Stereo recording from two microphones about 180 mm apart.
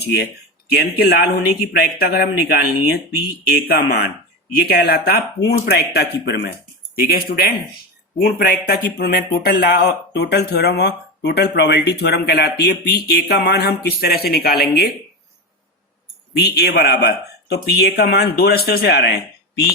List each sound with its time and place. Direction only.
0.0 s speech: 65° left (ahead or behind)
16.4 s speech: 65° left (ahead or behind)